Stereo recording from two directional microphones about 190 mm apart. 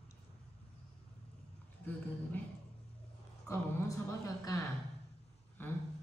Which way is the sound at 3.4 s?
15° left (ahead or behind).